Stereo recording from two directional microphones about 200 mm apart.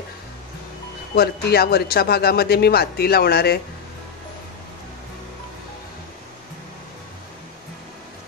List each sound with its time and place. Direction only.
1.1 s a man's voice: 50° left (ahead or behind)